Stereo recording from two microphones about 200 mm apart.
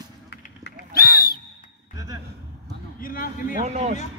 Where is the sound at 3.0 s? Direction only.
45° left (ahead or behind).